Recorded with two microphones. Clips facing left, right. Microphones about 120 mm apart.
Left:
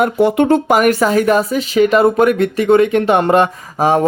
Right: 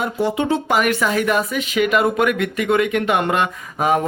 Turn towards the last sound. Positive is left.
turn(degrees=30)  # may be behind; listen again after turning